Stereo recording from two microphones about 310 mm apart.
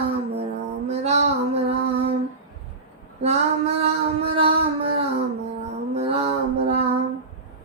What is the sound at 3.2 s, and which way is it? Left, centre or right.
Female singing, centre.